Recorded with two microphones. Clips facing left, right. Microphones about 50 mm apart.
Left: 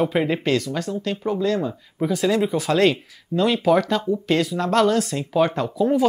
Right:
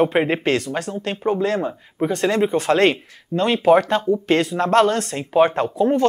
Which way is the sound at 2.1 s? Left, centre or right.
Right.